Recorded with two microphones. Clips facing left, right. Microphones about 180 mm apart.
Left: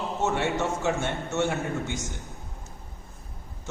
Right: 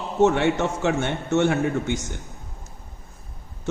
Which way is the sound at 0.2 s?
65° right (ahead or behind).